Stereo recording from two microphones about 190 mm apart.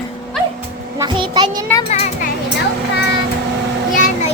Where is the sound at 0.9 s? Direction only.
25° right (ahead or behind).